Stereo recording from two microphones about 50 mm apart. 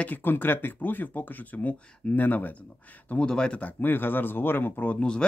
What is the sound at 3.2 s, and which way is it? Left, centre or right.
Speech, centre.